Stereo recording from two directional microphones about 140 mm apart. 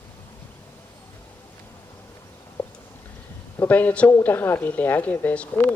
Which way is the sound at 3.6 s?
10° left (ahead or behind).